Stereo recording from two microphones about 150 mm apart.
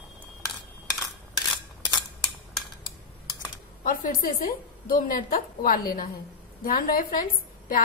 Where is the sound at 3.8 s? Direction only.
70° left (ahead or behind).